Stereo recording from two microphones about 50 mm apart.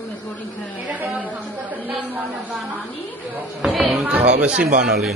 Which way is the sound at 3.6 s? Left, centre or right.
Centre.